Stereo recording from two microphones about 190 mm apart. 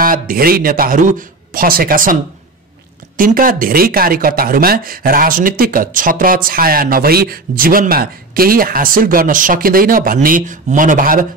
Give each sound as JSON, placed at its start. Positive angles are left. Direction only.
{"t": 0.0, "sound": "speech", "side_deg": -50}
{"t": 3.2, "sound": "speech", "side_deg": -45}